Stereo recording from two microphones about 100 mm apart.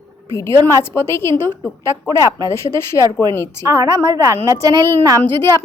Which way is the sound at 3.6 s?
30° right (ahead or behind).